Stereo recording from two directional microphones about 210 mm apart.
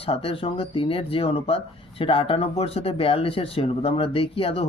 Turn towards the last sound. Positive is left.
turn(degrees=25)  # may be behind; listen again after turning